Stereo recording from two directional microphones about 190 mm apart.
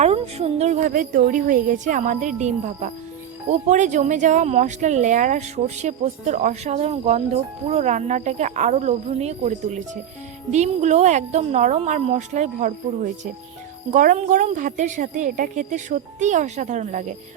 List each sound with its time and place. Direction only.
0.0 s speech: 35° right (ahead or behind)
13.9 s speech: 40° right (ahead or behind)